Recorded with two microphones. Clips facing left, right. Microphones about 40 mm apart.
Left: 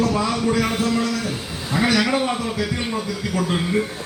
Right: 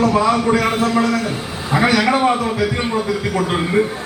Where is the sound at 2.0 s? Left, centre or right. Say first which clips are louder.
Right 6 dB; right.